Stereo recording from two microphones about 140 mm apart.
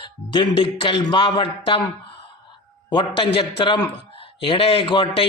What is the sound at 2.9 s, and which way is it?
A man's voice, 35° left (ahead or behind).